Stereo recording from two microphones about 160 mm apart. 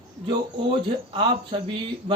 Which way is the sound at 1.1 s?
30° right (ahead or behind).